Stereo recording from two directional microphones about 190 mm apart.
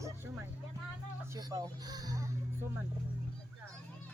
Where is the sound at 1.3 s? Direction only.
20° right (ahead or behind).